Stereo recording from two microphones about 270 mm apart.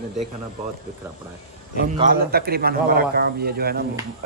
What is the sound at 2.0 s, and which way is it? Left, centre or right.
Speech, right.